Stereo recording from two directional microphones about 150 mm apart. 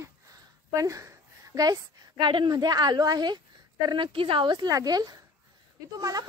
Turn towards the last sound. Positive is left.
turn(degrees=-25)  # may be behind; listen again after turning